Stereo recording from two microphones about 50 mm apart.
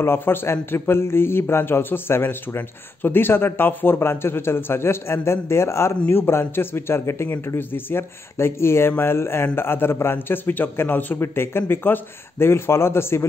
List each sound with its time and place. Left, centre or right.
0.0 s a man's voice: left
6.0 s a man's voice: left
11.1 s a man's voice: left